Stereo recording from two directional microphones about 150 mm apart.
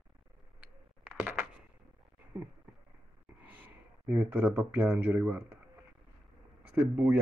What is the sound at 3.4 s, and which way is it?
Speech, 10° right (ahead or behind).